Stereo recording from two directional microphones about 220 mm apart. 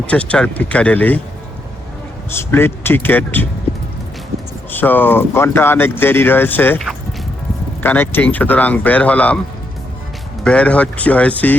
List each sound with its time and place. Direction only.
0.1 s speech: 5° left (ahead or behind)
2.4 s speech: 10° left (ahead or behind)
4.7 s speech: 10° left (ahead or behind)
10.4 s speech: 5° left (ahead or behind)